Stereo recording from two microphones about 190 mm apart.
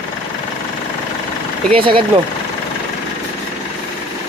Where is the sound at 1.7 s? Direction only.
25° right (ahead or behind).